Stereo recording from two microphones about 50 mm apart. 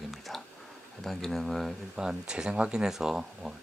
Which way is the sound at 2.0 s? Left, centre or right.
Centre.